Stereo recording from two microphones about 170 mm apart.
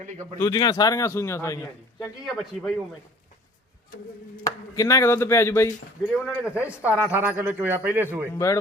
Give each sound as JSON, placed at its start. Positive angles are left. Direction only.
{"t": 0.3, "sound": "a man's voice", "side_deg": 20}
{"t": 2.2, "sound": "speech", "side_deg": 0}
{"t": 4.4, "sound": "speech", "side_deg": 20}
{"t": 6.0, "sound": "a man's voice", "side_deg": -5}
{"t": 8.3, "sound": "speech", "side_deg": 20}